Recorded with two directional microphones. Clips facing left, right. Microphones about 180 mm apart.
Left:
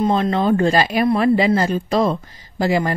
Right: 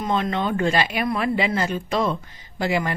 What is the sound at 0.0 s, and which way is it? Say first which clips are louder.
Speech: left 6 dB; 35° left (ahead or behind).